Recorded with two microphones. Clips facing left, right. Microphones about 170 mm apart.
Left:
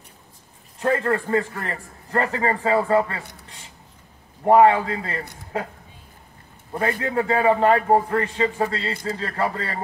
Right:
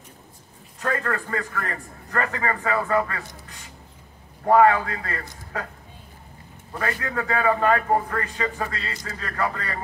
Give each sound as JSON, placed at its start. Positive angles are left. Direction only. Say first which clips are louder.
{"t": 0.7, "sound": "a man's voice", "louder": "left 5 dB", "side_deg": 25}
{"t": 3.4, "sound": "a sound", "louder": "right 1 dB", "side_deg": 25}
{"t": 4.5, "sound": "a man's voice", "louder": "left 2 dB", "side_deg": 25}